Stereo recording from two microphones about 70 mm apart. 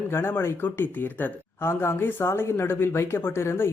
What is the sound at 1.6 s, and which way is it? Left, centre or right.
Speech, left.